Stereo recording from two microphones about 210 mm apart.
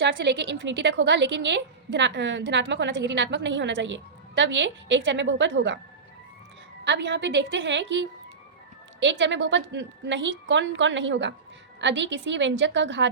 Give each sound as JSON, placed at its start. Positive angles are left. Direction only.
{"t": 0.0, "sound": "a woman's voice", "side_deg": -55}
{"t": 6.8, "sound": "a woman's voice", "side_deg": -55}